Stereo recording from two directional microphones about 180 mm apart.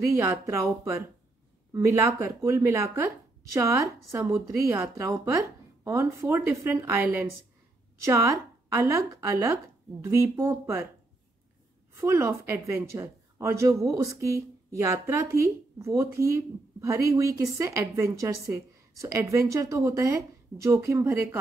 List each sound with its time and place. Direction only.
0.1 s speech: 15° right (ahead or behind)
12.0 s speech: 15° right (ahead or behind)
15.8 s speech: 15° right (ahead or behind)